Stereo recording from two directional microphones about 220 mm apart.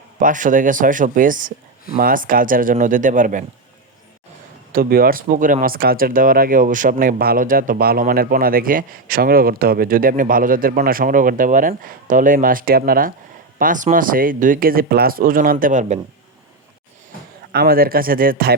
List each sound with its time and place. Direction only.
0.2 s speech: 35° right (ahead or behind)
4.7 s speech: 40° right (ahead or behind)
17.5 s speech: 45° right (ahead or behind)